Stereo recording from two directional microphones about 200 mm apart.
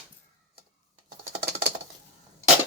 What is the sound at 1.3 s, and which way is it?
Patter, 55° right (ahead or behind).